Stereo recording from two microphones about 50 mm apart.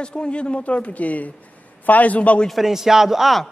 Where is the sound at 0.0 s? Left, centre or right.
Centre.